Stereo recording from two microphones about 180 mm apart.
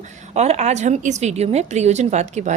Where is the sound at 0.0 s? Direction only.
35° right (ahead or behind).